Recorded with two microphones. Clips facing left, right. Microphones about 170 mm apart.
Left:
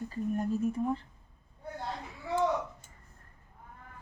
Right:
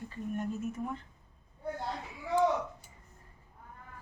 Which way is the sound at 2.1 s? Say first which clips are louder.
Right 1 dB; 15° right (ahead or behind).